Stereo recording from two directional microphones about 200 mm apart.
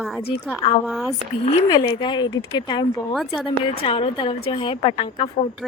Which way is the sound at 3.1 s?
Centre (ahead or behind).